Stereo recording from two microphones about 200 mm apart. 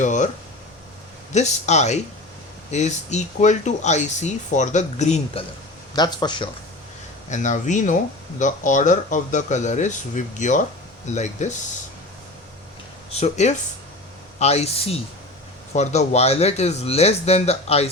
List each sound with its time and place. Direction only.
0.0 s a man's voice: 40° left (ahead or behind)
1.3 s a man's voice: 35° left (ahead or behind)
5.9 s speech: 20° left (ahead or behind)
7.3 s a man's voice: 40° left (ahead or behind)
13.1 s a man's voice: 30° left (ahead or behind)